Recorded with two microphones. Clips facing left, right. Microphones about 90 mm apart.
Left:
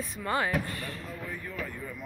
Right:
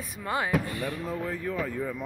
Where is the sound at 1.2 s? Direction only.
90° right.